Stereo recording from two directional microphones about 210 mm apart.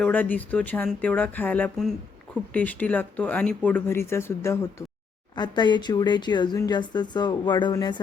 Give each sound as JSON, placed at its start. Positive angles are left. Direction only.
{"t": 0.0, "sound": "speech", "side_deg": 10}